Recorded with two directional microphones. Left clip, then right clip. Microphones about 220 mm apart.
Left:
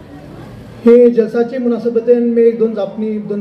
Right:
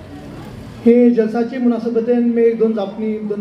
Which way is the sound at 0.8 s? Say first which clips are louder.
Left 5 dB; 45° left (ahead or behind).